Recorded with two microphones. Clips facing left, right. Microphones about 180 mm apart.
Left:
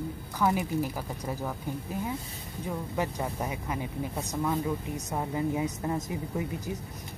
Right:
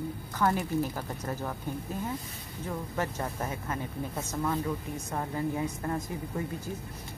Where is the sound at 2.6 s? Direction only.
15° left (ahead or behind).